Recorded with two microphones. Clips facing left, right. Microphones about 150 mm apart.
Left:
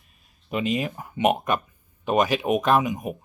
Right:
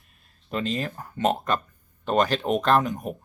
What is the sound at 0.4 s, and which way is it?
Speech, 10° left (ahead or behind).